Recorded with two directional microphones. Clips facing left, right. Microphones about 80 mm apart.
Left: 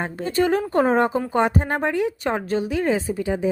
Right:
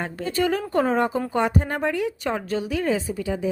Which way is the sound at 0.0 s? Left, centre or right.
Left.